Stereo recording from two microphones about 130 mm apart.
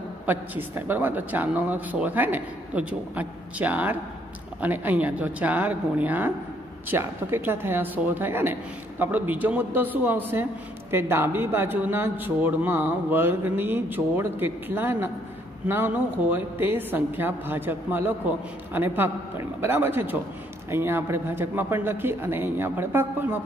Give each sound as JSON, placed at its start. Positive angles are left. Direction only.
{"t": 0.3, "sound": "speech", "side_deg": -15}